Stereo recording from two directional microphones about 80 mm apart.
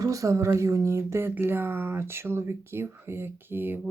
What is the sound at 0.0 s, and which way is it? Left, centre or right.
Speech, right.